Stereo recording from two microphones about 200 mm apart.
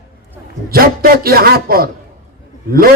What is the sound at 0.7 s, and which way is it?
A man's voice, 50° right (ahead or behind).